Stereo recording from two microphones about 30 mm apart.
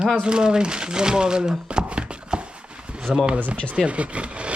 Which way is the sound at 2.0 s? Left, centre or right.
Right.